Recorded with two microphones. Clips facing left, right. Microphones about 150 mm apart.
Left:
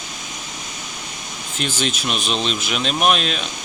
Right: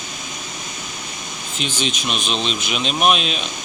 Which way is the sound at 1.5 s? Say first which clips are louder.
Left 1 dB; 45° left (ahead or behind).